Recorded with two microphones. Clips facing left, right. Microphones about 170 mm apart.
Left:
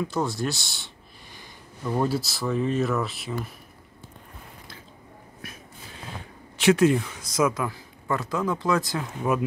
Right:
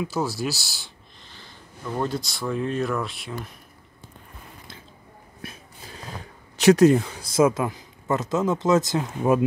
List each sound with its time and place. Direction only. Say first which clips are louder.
0.0 s speech: even; 5° right (ahead or behind)
1.3 s speech: even; 10° left (ahead or behind)
5.4 s a sound: right 3 dB; 30° right (ahead or behind)
6.6 s speech: right 4 dB; 40° right (ahead or behind)